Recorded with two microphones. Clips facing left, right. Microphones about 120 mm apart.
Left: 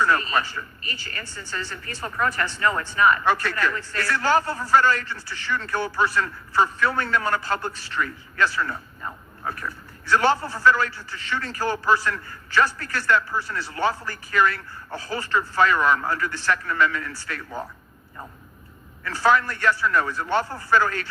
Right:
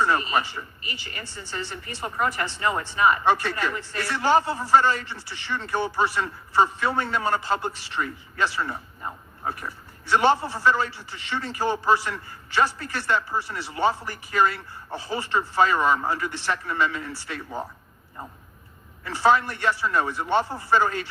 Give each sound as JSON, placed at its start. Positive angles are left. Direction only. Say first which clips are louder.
{"t": 0.0, "sound": "speech", "louder": "left 1 dB", "side_deg": -20}
{"t": 19.0, "sound": "speech", "louder": "even", "side_deg": -20}